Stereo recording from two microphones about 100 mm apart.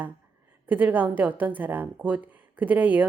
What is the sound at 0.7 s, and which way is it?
A woman's voice, 15° right (ahead or behind).